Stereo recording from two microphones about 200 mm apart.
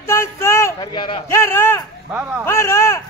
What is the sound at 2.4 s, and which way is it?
Speech, 15° left (ahead or behind).